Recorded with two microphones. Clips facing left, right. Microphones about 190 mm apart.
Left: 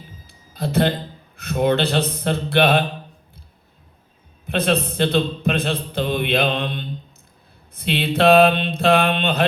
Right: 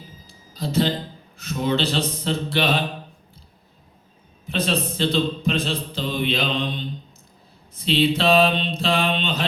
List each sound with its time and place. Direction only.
0.3 s a sound: 60° left (ahead or behind)
1.4 s speech: 60° left (ahead or behind)
4.4 s a man's voice: 60° left (ahead or behind)
7.8 s mantra: 60° left (ahead or behind)